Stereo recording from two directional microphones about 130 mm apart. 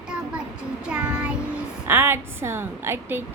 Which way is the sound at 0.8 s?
10° right (ahead or behind).